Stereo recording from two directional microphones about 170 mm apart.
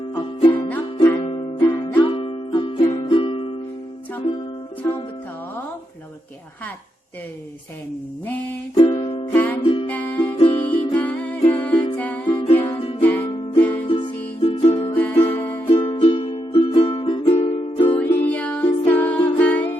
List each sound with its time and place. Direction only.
0.1 s music: 30° left (ahead or behind)
0.6 s music: 15° left (ahead or behind)
1.2 s music: 30° left (ahead or behind)
4.8 s music: 15° left (ahead or behind)
8.7 s music: 30° left (ahead or behind)
9.3 s music: 10° left (ahead or behind)
10.2 s music: 35° left (ahead or behind)
10.9 s music: 10° left (ahead or behind)
12.6 s music: 30° left (ahead or behind)
13.0 s music: 10° left (ahead or behind)
13.8 s music: 30° left (ahead or behind)
14.9 s music: 10° left (ahead or behind)
15.6 s music: 35° left (ahead or behind)
17.9 s music: 10° left (ahead or behind)